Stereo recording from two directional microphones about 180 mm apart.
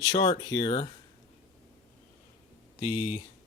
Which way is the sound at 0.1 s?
25° left (ahead or behind).